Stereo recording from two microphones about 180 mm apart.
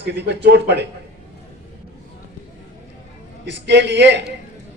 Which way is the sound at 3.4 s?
75° right (ahead or behind).